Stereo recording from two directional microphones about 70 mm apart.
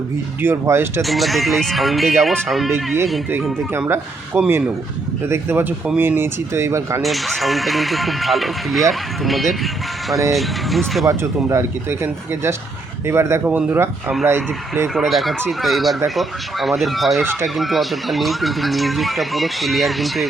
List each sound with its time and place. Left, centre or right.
0.4 s speech: right
1.0 s speech: centre
2.7 s speech: right
4.3 s speech: right
5.2 s speech: right
7.0 s speech: centre
11.2 s speech: right
13.4 s speech: right
14.3 s speech: right
14.9 s speech: centre